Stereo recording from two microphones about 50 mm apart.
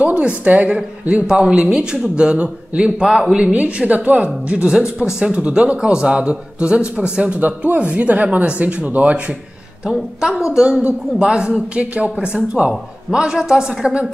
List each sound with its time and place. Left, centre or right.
0.0 s speech: right
1.2 s a woman's voice: centre
3.5 s speech: right
9.8 s a woman's voice: centre
10.8 s a woman's voice: right